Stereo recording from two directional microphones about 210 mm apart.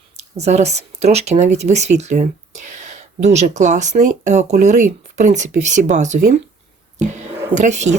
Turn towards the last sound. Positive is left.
turn(degrees=-35)  # may be behind; listen again after turning